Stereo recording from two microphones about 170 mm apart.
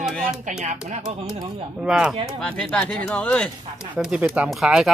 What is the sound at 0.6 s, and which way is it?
Speech, 45° right (ahead or behind).